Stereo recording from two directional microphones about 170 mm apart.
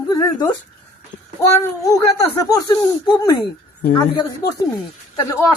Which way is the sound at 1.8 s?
20° left (ahead or behind).